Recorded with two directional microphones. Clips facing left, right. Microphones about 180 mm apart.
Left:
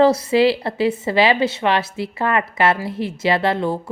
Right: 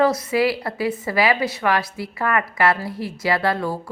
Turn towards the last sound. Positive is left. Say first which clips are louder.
# left 3 dB
turn(degrees=25)  # may be behind; listen again after turning